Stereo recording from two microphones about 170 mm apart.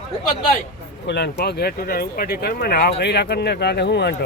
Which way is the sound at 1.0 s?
85° left.